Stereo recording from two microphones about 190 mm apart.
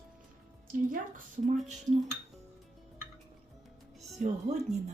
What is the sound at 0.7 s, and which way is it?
Speech, 45° right (ahead or behind).